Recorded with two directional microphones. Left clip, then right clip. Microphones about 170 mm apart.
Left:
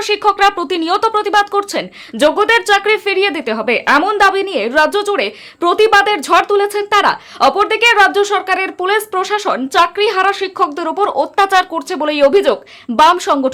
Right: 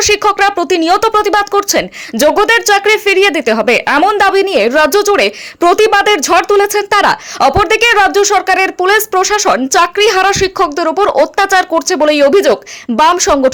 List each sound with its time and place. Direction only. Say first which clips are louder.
0.0 s speech: right 2 dB; 30° right (ahead or behind)